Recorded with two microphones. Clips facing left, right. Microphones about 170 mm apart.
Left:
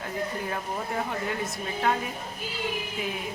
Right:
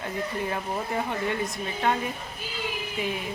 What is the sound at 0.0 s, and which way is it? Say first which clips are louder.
Speech: right 1 dB; 5° right (ahead or behind).